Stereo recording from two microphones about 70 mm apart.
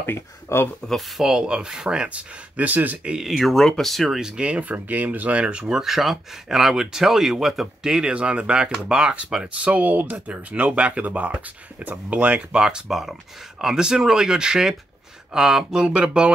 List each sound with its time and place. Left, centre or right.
0.0 s speech: left
0.8 s speech: centre
3.3 s speech: centre
4.2 s speech: centre